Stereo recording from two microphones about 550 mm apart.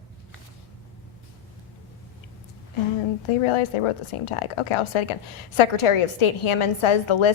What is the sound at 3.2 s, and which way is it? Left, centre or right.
A woman's voice, left.